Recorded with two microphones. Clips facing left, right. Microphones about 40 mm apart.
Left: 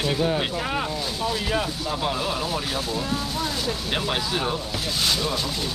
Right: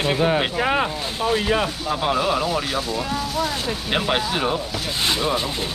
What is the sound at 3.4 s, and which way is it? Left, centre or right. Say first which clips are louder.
Speech: right 2 dB; right.